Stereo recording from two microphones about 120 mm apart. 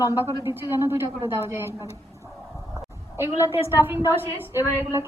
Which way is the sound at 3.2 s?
20° right (ahead or behind).